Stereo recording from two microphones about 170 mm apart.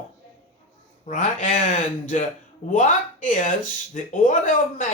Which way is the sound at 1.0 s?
45° left (ahead or behind).